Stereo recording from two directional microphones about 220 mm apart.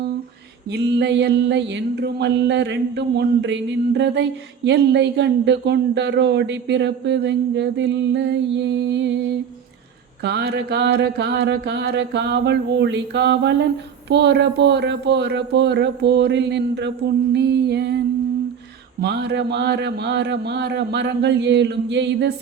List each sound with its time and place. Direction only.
0.7 s mantra: 50° right (ahead or behind)
10.2 s mantra: 50° right (ahead or behind)
19.0 s mantra: 50° right (ahead or behind)